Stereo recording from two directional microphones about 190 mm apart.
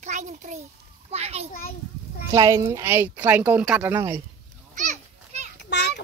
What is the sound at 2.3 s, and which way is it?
Speech, 15° right (ahead or behind).